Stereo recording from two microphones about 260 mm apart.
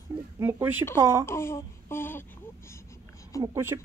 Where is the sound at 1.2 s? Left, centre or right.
Centre.